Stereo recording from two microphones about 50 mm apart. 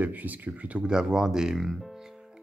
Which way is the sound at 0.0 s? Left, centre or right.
Right.